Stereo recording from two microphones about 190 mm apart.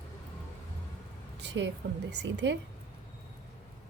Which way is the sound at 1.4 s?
65° right (ahead or behind).